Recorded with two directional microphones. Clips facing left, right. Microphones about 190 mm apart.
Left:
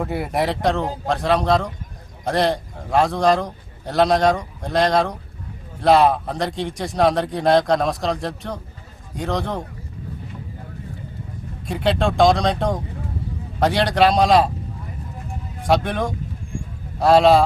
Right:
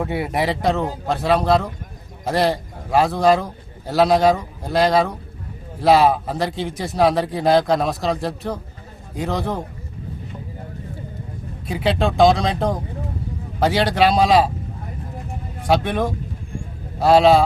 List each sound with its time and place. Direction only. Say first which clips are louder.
0.0 s a man's voice: even; centre (ahead or behind)
11.7 s a man's voice: even; centre (ahead or behind)
15.6 s a man's voice: right 1 dB; centre (ahead or behind)